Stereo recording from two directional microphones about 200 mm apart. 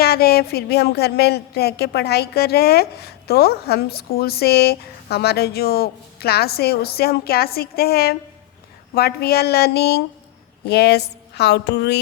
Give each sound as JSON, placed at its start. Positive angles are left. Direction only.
{"t": 0.0, "sound": "a woman's voice", "side_deg": 50}